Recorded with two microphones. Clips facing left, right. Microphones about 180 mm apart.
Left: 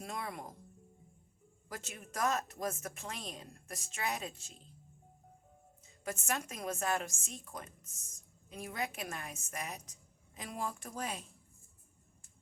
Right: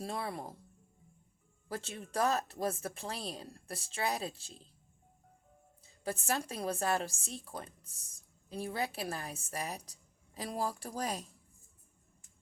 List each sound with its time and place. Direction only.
0.0 s a woman's voice: 30° right (ahead or behind)
1.6 s a woman's voice: 30° right (ahead or behind)
5.8 s a woman's voice: 30° right (ahead or behind)